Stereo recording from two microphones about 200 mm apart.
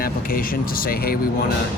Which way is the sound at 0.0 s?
45° left (ahead or behind).